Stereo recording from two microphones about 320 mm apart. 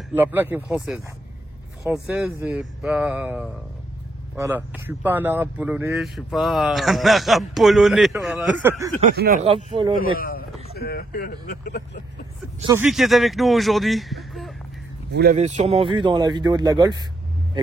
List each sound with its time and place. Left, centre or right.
0.1 s speech: centre
9.0 s speech: right
9.9 s speech: left
12.5 s speech: centre
12.8 s speech: centre
15.1 s speech: right